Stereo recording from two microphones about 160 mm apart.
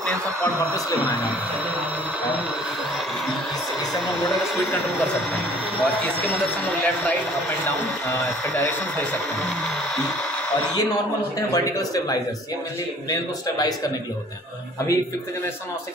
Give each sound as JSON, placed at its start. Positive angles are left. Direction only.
{"t": 11.5, "sound": "speech", "side_deg": 20}